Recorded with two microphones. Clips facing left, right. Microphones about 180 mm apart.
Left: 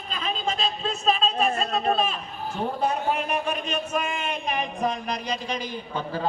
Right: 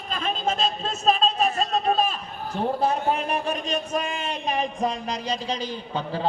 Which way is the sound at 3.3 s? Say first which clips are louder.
Right 1 dB; 35° right (ahead or behind).